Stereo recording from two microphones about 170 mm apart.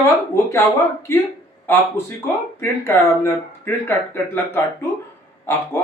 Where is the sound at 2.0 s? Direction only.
15° left (ahead or behind).